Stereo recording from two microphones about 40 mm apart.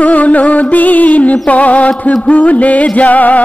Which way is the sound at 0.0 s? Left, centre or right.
Left.